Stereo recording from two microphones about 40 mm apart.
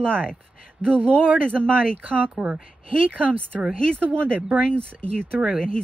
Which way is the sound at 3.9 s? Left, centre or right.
Right.